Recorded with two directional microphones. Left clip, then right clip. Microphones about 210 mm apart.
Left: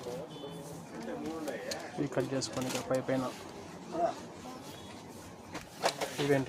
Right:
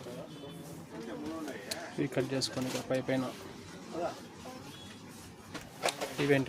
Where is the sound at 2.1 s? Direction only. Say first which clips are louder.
Even; 25° right (ahead or behind).